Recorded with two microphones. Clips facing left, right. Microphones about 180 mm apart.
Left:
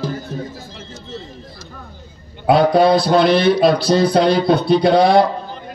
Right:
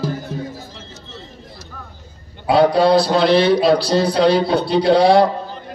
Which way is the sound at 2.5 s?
55° left (ahead or behind).